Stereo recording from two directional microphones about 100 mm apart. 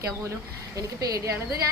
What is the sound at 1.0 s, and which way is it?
Speech, 35° right (ahead or behind).